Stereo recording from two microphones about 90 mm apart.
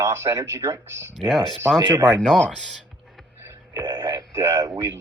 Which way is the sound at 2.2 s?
10° left (ahead or behind).